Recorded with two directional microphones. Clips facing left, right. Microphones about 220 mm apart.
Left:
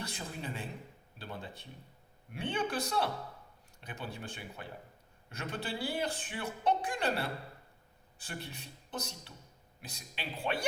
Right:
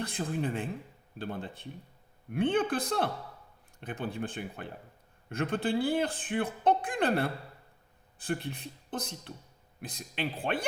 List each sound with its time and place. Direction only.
0.0 s a man's voice: 55° right (ahead or behind)